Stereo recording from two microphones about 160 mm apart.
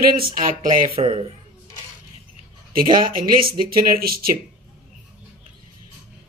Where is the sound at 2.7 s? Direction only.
60° right (ahead or behind).